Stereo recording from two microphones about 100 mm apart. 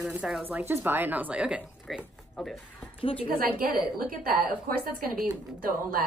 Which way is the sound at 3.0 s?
65° left (ahead or behind).